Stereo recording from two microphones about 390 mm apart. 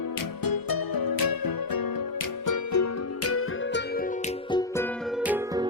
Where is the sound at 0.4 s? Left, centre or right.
Left.